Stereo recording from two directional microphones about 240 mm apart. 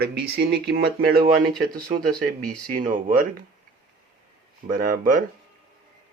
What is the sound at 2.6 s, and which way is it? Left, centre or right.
Speech, right.